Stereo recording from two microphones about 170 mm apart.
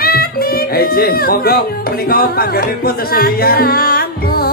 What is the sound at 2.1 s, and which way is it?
Music, 65° left (ahead or behind).